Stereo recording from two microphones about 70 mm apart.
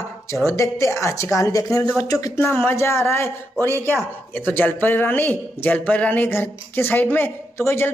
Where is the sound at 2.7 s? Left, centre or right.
Left.